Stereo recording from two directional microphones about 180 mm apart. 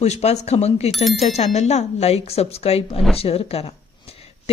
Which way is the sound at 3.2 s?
35° left (ahead or behind).